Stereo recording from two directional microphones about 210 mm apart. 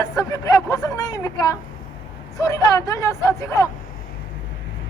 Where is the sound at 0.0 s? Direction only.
15° left (ahead or behind).